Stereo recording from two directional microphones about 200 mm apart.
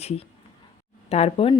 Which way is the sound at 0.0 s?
30° left (ahead or behind).